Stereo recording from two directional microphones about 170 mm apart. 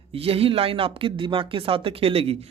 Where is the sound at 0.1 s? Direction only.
35° right (ahead or behind).